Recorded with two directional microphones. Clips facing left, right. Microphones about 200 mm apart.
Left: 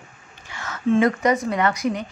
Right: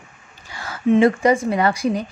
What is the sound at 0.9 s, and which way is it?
A woman's voice, 30° right (ahead or behind).